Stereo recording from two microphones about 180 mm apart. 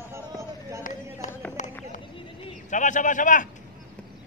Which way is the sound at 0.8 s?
45° left (ahead or behind).